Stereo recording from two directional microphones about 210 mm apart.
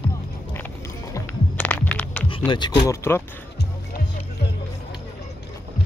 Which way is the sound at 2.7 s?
10° left (ahead or behind).